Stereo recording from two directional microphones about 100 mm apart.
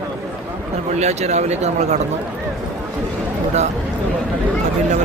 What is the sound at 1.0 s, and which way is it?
Speech, 90° right.